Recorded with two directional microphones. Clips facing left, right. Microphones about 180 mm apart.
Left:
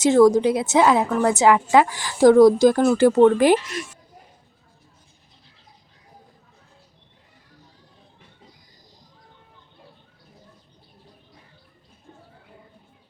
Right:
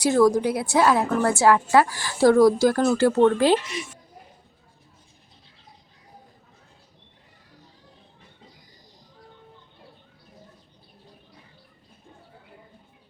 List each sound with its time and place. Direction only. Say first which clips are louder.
0.0 s a woman's voice: left 4 dB; 20° left (ahead or behind)